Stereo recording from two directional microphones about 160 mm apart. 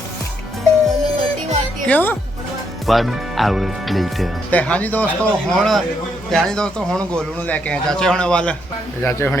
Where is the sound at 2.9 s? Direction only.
Centre (ahead or behind).